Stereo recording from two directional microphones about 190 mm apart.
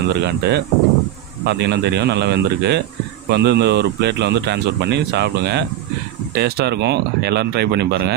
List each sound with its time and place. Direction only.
0.1 s speech: 60° right (ahead or behind)